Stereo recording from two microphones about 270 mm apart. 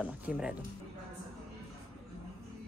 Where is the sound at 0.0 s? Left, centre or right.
Centre.